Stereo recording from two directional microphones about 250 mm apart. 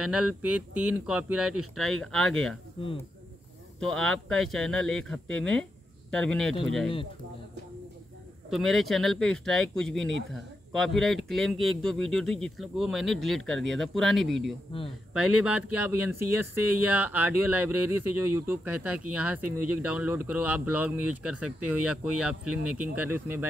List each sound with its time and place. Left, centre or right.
0.0 s speech: centre
2.8 s speech: left
3.8 s speech: centre
8.5 s speech: centre
14.7 s speech: centre
15.4 s speech: centre